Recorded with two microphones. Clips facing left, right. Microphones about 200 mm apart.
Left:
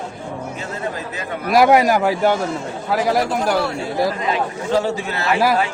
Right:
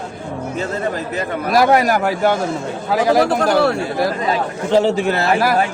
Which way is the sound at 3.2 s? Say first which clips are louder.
Right 4 dB; 65° right (ahead or behind).